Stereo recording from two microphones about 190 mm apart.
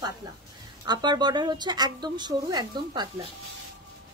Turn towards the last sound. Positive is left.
turn(degrees=-20)  # may be behind; listen again after turning